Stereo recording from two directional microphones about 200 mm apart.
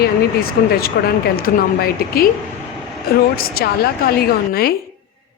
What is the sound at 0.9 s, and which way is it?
Speech, 55° left (ahead or behind).